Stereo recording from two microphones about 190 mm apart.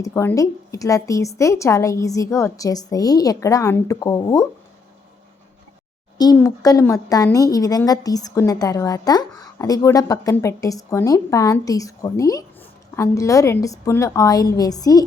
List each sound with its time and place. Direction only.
0.0 s speech: 15° left (ahead or behind)
6.1 s speech: 20° left (ahead or behind)